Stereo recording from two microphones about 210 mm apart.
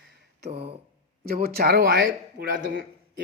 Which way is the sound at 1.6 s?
45° right (ahead or behind).